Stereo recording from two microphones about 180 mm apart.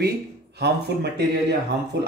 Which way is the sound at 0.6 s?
65° right (ahead or behind).